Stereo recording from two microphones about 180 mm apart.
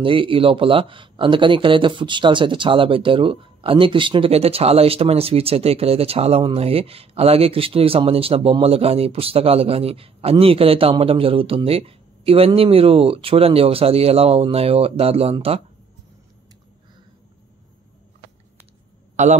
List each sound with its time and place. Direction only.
0.0 s speech: 30° right (ahead or behind)
19.2 s a man's voice: 40° right (ahead or behind)